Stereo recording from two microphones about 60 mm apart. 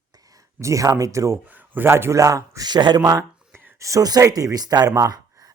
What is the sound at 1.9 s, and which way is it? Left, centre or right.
Speech, right.